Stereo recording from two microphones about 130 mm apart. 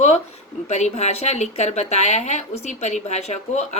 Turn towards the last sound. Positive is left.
turn(degrees=60)  # may be behind; listen again after turning